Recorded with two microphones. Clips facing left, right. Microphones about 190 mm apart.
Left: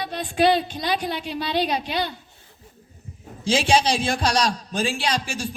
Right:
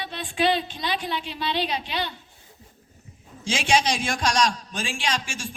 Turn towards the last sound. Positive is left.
turn(degrees=35)  # may be behind; listen again after turning